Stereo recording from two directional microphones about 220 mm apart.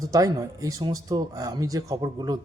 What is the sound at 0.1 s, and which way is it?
Speech, 15° right (ahead or behind).